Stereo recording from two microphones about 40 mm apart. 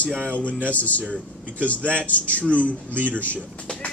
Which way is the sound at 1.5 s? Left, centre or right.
Left.